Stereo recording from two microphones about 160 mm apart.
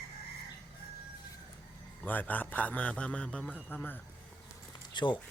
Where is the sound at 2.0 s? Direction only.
10° left (ahead or behind).